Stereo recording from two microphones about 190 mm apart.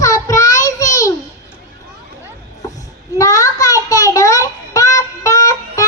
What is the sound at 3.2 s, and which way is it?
Child singing, 15° left (ahead or behind).